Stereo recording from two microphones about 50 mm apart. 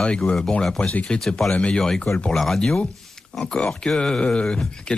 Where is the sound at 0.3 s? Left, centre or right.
Centre.